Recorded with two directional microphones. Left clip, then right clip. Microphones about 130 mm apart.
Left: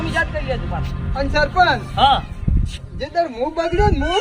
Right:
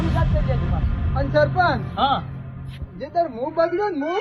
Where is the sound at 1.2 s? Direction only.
70° left (ahead or behind).